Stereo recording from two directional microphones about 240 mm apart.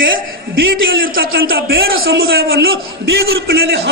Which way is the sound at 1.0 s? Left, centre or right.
Right.